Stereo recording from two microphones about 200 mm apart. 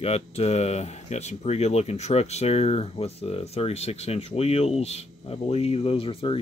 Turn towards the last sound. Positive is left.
turn(degrees=25)  # may be behind; listen again after turning